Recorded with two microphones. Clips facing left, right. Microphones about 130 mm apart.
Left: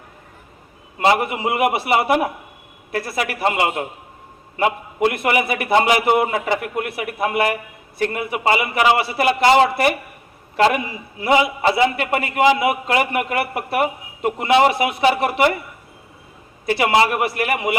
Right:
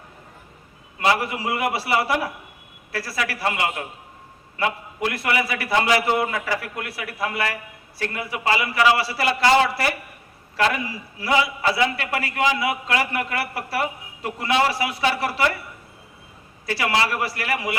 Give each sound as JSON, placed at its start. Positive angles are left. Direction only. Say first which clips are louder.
{"t": 0.9, "sound": "a man's voice", "louder": "left 4 dB", "side_deg": 20}
{"t": 16.6, "sound": "a man's voice", "louder": "left 6 dB", "side_deg": 25}